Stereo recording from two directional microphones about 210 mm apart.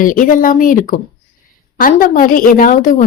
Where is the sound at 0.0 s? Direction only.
40° left (ahead or behind).